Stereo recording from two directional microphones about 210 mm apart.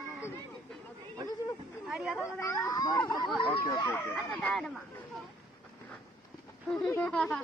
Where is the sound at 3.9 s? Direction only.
5° left (ahead or behind).